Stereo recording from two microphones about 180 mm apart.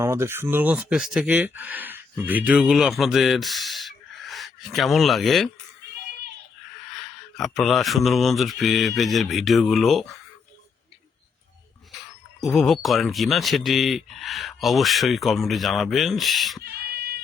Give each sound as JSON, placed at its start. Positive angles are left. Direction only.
{"t": 0.0, "sound": "speech", "side_deg": -15}
{"t": 7.3, "sound": "speech", "side_deg": 0}
{"t": 12.4, "sound": "speech", "side_deg": 0}
{"t": 16.6, "sound": "a sound", "side_deg": -60}